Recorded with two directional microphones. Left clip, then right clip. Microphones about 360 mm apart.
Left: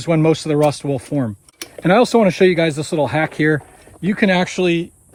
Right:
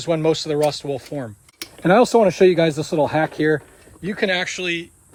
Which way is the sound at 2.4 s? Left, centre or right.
Left.